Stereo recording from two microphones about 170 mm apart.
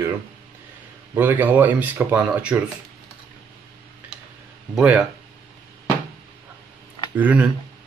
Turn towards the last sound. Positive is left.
turn(degrees=-5)  # may be behind; listen again after turning